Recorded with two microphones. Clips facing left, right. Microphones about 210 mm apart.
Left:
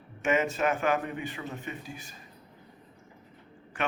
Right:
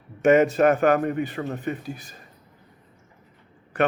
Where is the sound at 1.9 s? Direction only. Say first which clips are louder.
Right 8 dB; 35° right (ahead or behind).